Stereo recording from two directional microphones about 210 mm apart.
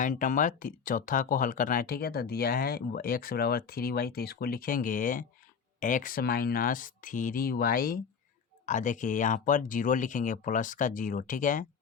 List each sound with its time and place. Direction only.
0.0 s speech: 40° left (ahead or behind)